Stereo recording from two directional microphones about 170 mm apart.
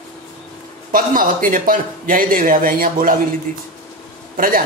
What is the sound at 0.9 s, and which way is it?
Speech, 55° right (ahead or behind).